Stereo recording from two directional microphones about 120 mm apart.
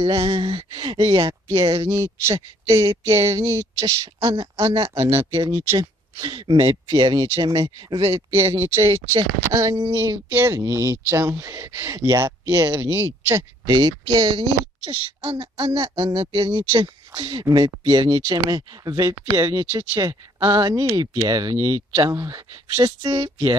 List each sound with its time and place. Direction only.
0.2 s speech: 45° right (ahead or behind)
1.2 s speech: 25° right (ahead or behind)
4.0 s speech: 55° right (ahead or behind)
4.8 s speech: 20° right (ahead or behind)
6.3 s speech: 40° right (ahead or behind)
8.3 s speech: 20° right (ahead or behind)
13.4 s speech: 40° right (ahead or behind)
23.0 s speech: 40° right (ahead or behind)